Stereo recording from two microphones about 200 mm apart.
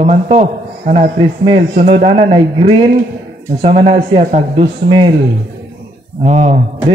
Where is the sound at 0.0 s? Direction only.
35° right (ahead or behind).